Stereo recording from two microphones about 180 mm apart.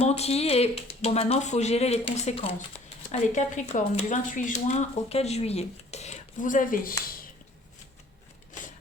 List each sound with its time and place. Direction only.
0.0 s speech: 35° left (ahead or behind)